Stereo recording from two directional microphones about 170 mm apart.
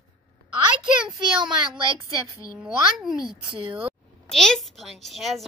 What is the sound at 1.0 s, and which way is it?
Speech, 30° right (ahead or behind).